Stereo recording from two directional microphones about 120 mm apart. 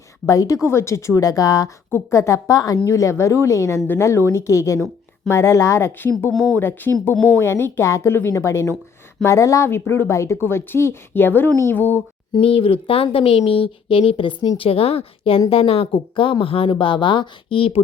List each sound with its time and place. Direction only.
0.3 s speech: 25° left (ahead or behind)
12.3 s speech: 50° left (ahead or behind)